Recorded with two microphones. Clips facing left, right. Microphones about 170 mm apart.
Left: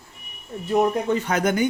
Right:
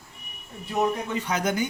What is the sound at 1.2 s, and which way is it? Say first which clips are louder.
Speech: left 5 dB; 55° left (ahead or behind).